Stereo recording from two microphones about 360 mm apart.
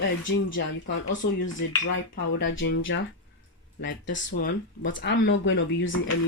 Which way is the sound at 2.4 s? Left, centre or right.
Left.